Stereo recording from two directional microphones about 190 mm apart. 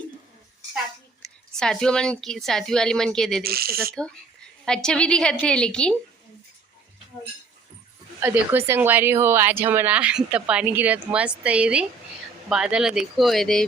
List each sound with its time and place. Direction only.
1.2 s a woman's voice: centre (ahead or behind)
3.4 s speech: 55° right (ahead or behind)
4.6 s a woman's voice: 5° left (ahead or behind)
8.2 s a woman's voice: 10° right (ahead or behind)